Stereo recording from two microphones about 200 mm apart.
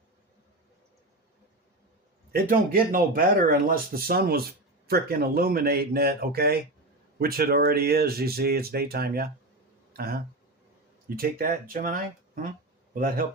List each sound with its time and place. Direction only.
2.3 s speech: 45° right (ahead or behind)